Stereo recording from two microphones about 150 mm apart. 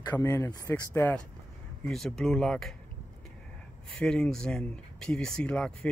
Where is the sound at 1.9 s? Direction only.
5° left (ahead or behind).